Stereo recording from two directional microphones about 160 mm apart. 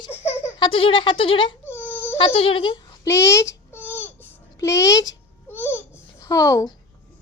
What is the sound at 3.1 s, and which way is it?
Babbling, 20° left (ahead or behind).